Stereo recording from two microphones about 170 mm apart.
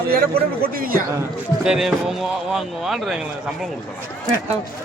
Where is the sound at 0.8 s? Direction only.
55° right (ahead or behind).